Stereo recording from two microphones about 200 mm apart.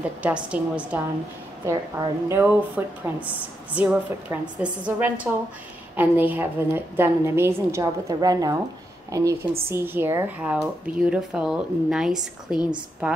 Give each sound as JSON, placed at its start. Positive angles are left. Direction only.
{"t": 0.2, "sound": "speech", "side_deg": -5}